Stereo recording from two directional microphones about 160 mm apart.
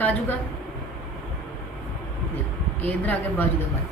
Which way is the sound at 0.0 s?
10° left (ahead or behind).